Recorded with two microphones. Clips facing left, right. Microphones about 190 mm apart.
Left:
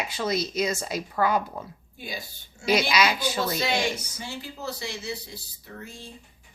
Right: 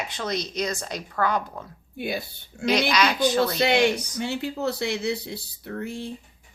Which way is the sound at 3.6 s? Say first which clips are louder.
Right 6 dB; 60° right (ahead or behind).